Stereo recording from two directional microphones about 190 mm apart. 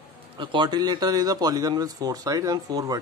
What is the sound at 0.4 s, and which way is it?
Speech, 25° right (ahead or behind).